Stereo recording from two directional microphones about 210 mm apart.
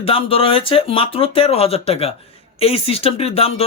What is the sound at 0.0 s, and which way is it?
Speech, 25° left (ahead or behind).